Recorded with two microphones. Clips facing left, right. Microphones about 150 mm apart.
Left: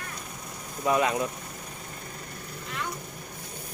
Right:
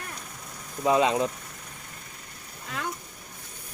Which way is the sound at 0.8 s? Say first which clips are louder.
Right 3 dB; 20° right (ahead or behind).